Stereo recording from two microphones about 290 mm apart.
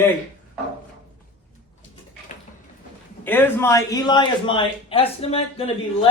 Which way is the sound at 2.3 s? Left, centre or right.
Left.